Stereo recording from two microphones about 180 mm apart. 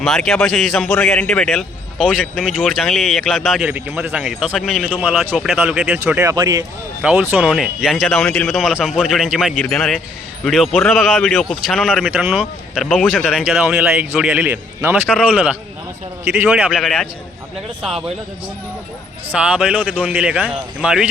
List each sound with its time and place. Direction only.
0.0 s a man's voice: centre (ahead or behind)
6.2 s speech: 25° right (ahead or behind)
7.0 s a man's voice: 10° right (ahead or behind)
19.3 s a man's voice: 5° right (ahead or behind)